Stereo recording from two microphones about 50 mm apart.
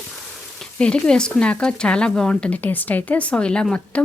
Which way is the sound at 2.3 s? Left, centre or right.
Left.